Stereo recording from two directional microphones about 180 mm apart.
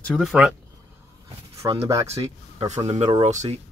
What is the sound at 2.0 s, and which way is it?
Speech, 35° right (ahead or behind).